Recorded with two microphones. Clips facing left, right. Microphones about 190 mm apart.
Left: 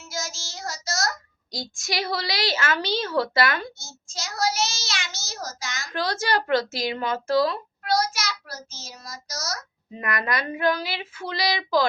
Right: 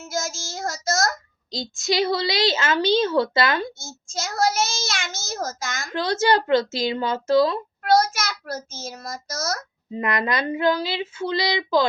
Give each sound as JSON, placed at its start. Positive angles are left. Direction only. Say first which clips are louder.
{"t": 0.1, "sound": "child singing", "louder": "right 5 dB", "side_deg": -50}
{"t": 1.5, "sound": "a woman's voice", "louder": "right 7 dB", "side_deg": -25}
{"t": 3.8, "sound": "a child's voice", "louder": "right 6 dB", "side_deg": -50}
{"t": 5.9, "sound": "a woman's voice", "louder": "right 5 dB", "side_deg": -25}
{"t": 7.9, "sound": "a child's voice", "louder": "right 5 dB", "side_deg": -50}
{"t": 9.9, "sound": "a woman's voice", "louder": "right 4 dB", "side_deg": -25}